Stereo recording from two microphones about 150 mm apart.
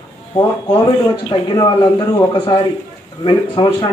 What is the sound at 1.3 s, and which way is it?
Speech, 30° left (ahead or behind).